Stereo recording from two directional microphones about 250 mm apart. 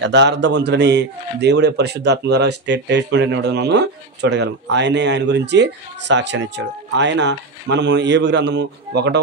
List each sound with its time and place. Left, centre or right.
0.0 s a man's voice: right